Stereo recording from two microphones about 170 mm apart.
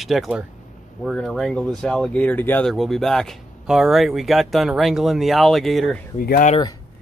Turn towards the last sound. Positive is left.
turn(degrees=55)  # may be behind; listen again after turning